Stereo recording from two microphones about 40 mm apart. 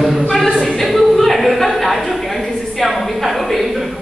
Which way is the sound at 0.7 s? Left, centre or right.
Centre.